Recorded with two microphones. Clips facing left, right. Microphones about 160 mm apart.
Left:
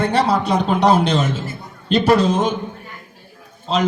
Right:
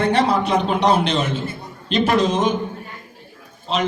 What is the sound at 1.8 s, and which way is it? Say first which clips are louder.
Speech: left 3 dB; 35° left (ahead or behind).